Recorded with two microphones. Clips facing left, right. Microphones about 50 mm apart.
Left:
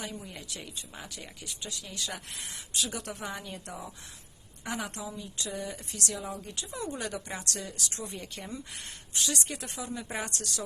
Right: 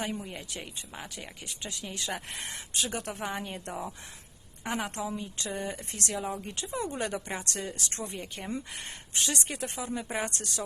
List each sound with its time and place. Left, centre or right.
0.3 s speech: right
6.1 s speech: right